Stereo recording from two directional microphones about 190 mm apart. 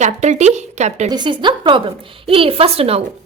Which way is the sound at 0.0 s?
35° right (ahead or behind).